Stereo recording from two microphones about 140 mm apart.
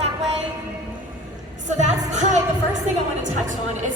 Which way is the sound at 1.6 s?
55° right (ahead or behind).